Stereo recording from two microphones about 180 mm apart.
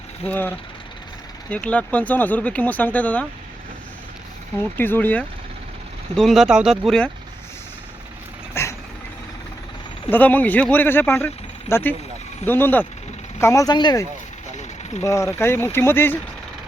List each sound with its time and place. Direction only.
0.3 s speech: 10° left (ahead or behind)
4.8 s speech: 10° left (ahead or behind)
6.1 s speech: centre (ahead or behind)
8.6 s vehicle: 15° left (ahead or behind)
10.1 s speech: 10° left (ahead or behind)